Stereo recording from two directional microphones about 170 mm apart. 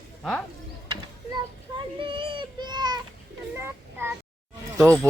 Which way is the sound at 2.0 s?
30° right (ahead or behind).